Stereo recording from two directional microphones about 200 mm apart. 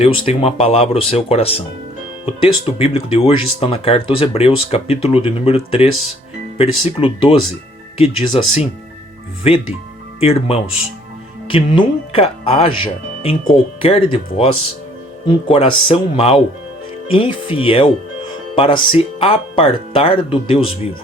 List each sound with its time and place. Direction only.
0.0 s speech: 25° left (ahead or behind)